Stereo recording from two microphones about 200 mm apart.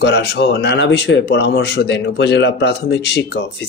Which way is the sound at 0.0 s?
55° left (ahead or behind).